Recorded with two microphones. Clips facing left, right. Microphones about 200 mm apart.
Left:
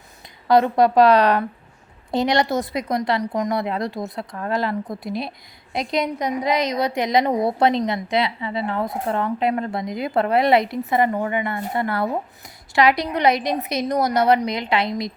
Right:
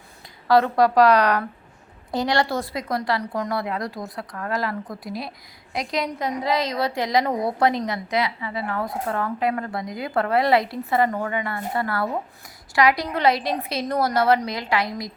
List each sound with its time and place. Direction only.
0.4 s a woman's voice: 20° left (ahead or behind)